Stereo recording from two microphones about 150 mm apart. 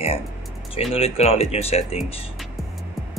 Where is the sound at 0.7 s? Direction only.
40° left (ahead or behind).